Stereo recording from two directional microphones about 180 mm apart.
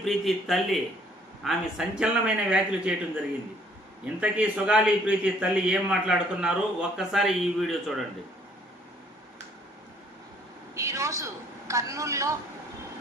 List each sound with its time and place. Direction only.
0.0 s a man's voice: centre (ahead or behind)
4.2 s a man's voice: 5° right (ahead or behind)
10.8 s a woman's voice: 15° right (ahead or behind)